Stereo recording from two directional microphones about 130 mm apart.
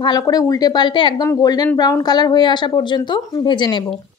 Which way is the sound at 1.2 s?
25° left (ahead or behind).